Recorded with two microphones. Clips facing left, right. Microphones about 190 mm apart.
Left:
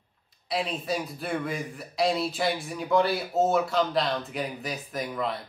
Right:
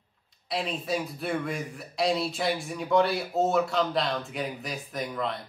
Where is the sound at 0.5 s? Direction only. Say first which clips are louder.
Left 1 dB; centre (ahead or behind).